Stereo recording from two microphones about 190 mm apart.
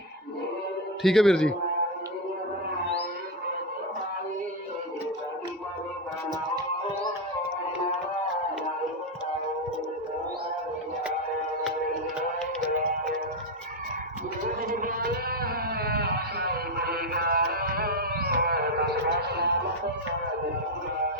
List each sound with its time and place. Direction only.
1.0 s a man's voice: centre (ahead or behind)
14.7 s a sound: 50° right (ahead or behind)
19.3 s music: 55° right (ahead or behind)